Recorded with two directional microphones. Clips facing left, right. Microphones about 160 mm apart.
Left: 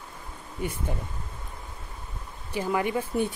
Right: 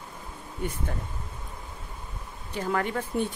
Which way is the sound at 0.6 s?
10° left (ahead or behind).